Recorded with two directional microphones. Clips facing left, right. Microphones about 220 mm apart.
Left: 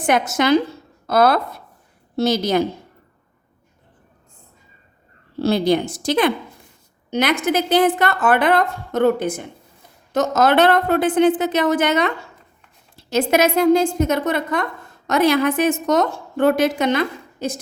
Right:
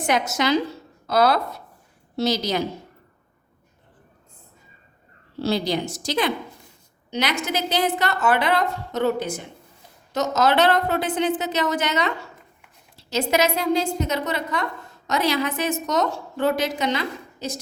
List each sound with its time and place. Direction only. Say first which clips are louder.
0.0 s a woman's voice: left 4 dB; 55° left (ahead or behind)
5.4 s a woman's voice: left 6 dB; 55° left (ahead or behind)